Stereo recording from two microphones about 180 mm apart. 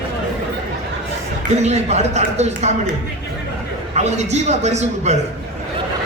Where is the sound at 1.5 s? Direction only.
40° right (ahead or behind).